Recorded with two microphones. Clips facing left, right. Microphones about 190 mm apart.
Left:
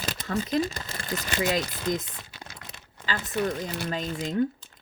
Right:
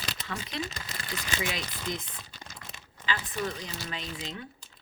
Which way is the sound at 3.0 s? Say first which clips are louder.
Left 5 dB; 45° left (ahead or behind).